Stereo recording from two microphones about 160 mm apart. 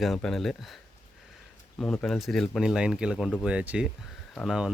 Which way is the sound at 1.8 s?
5° left (ahead or behind).